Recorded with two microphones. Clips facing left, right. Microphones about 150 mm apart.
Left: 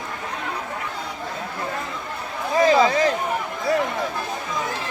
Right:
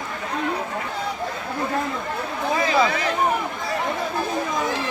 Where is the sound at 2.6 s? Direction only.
35° left (ahead or behind).